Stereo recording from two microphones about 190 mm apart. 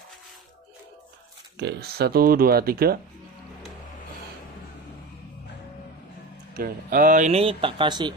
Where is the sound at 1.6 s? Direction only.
60° right (ahead or behind).